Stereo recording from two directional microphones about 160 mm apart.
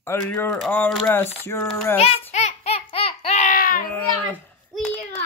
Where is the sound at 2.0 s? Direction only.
40° left (ahead or behind); by 3.8 s 60° left (ahead or behind).